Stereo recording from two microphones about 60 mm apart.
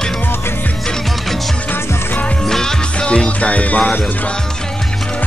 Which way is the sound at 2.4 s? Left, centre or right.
Centre.